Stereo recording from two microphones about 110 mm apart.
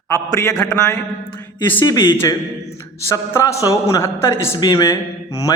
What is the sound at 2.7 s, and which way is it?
A man's voice, 25° left (ahead or behind).